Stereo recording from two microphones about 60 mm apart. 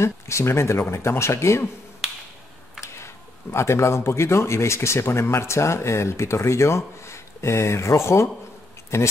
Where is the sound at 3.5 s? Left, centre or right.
Left.